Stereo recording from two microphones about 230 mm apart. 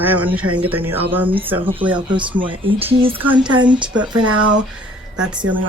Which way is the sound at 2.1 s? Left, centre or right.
Right.